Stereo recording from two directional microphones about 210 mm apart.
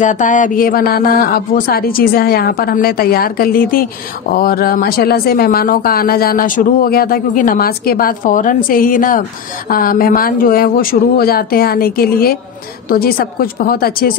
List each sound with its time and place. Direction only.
0.0 s a woman's voice: 35° left (ahead or behind)